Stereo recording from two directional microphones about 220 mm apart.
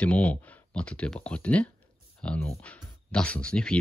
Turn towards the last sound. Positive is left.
turn(degrees=5)  # may be behind; listen again after turning